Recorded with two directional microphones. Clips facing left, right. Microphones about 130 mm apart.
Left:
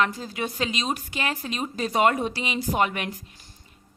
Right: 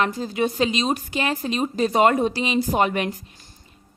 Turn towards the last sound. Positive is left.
turn(degrees=-30)  # may be behind; listen again after turning